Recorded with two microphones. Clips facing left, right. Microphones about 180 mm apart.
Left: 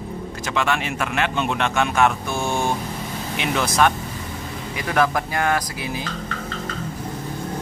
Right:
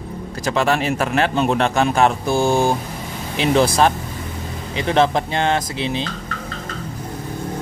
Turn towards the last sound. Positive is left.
turn(degrees=-25)  # may be behind; listen again after turning